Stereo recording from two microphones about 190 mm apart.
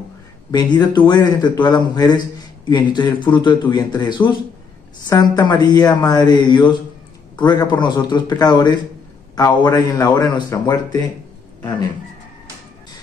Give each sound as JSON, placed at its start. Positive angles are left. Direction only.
{"t": 0.5, "sound": "a man's voice", "side_deg": 20}